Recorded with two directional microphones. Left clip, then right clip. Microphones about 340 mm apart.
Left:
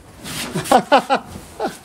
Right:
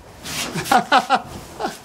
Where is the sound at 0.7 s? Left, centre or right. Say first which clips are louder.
Left 2 dB; centre.